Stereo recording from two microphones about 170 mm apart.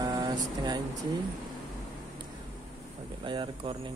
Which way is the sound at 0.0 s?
25° right (ahead or behind).